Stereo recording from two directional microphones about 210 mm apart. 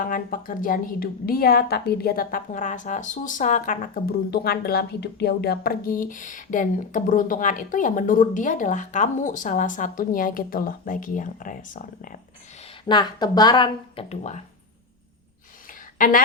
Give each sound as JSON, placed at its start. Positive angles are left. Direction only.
{"t": 0.0, "sound": "a woman's voice", "side_deg": 40}
{"t": 12.6, "sound": "speech", "side_deg": 20}
{"t": 16.0, "sound": "a woman's voice", "side_deg": 40}